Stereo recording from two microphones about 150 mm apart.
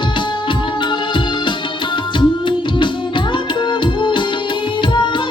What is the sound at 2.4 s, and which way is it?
Music, 30° left (ahead or behind).